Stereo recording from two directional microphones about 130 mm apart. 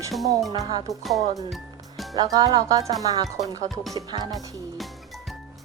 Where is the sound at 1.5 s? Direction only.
Centre (ahead or behind).